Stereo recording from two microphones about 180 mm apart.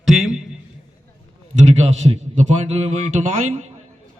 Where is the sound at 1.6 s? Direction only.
35° right (ahead or behind).